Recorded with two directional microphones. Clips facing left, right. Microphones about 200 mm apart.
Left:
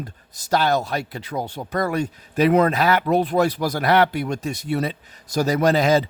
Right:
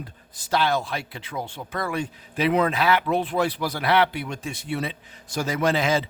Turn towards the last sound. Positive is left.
turn(degrees=40)  # may be behind; listen again after turning